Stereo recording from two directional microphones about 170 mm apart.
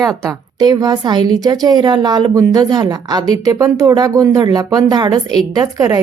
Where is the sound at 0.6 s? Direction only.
25° right (ahead or behind).